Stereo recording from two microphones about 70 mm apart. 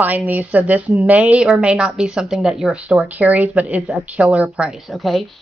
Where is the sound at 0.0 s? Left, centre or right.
Right.